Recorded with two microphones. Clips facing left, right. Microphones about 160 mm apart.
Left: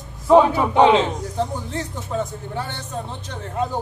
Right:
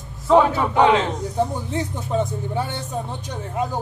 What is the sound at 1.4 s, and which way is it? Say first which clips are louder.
Speech: right 3 dB; 15° right (ahead or behind).